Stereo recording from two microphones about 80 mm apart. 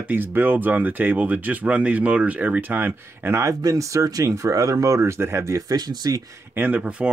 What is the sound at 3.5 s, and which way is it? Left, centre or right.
Speech, right.